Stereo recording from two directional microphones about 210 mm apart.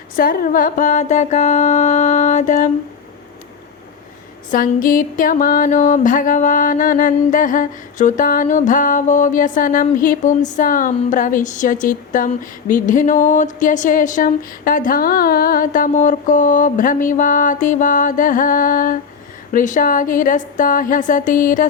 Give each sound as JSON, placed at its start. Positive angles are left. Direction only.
{"t": 0.2, "sound": "music", "side_deg": 45}
{"t": 4.5, "sound": "music", "side_deg": 40}